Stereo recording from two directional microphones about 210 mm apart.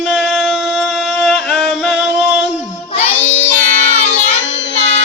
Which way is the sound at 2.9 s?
30° left (ahead or behind).